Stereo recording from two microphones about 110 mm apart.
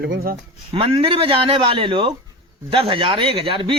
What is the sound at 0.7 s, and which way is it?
Speech, 55° right (ahead or behind).